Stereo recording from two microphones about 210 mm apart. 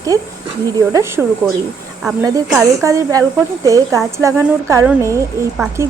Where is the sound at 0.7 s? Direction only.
15° right (ahead or behind).